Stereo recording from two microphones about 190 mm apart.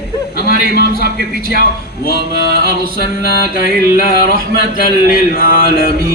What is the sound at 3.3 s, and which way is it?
Music, 50° left (ahead or behind).